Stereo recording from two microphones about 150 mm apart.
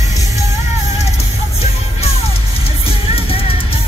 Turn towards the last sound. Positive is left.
turn(degrees=40)  # may be behind; listen again after turning